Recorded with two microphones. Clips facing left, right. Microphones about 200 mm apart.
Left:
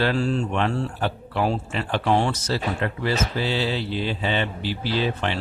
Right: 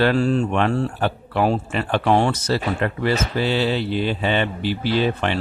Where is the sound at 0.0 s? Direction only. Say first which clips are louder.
Right 5 dB; 60° right (ahead or behind).